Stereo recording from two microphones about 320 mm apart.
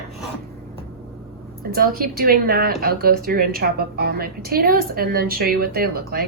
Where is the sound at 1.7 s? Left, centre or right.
Right.